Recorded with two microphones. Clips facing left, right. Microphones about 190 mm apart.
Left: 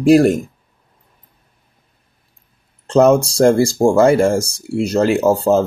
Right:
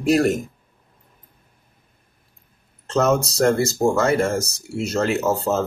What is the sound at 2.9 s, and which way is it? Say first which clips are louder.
Speech: left 7 dB; 30° left (ahead or behind).